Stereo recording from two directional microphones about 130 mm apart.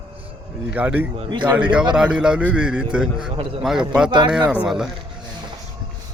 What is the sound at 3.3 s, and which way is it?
Speech, 45° right (ahead or behind).